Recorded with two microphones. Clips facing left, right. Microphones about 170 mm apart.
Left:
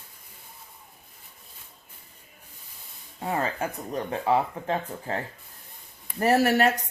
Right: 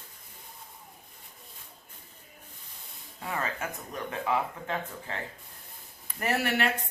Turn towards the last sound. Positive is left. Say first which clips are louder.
# left 8 dB
turn(degrees=40)  # may be behind; listen again after turning